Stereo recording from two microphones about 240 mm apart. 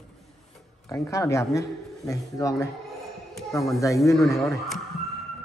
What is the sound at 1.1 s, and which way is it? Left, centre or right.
Speech, centre.